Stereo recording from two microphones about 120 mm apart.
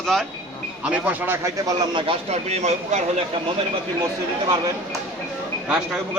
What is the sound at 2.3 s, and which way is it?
Speech, 70° right (ahead or behind).